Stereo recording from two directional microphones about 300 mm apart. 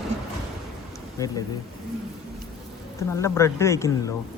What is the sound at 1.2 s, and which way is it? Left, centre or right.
Speech, centre.